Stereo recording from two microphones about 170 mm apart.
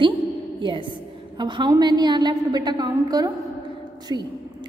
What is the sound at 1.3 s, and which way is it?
A woman's voice, 25° right (ahead or behind).